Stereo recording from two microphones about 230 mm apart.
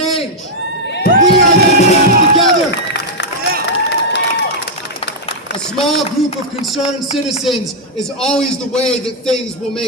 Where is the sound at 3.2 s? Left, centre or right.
Left.